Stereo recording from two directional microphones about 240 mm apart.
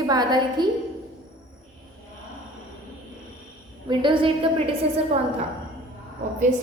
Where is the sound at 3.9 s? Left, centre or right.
Centre.